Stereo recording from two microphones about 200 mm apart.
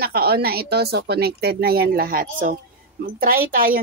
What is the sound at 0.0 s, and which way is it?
Speech, 50° right (ahead or behind).